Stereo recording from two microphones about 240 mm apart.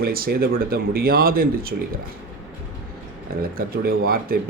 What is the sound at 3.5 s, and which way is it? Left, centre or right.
Speech, right.